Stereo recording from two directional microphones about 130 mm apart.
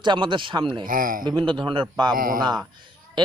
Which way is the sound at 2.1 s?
90° right.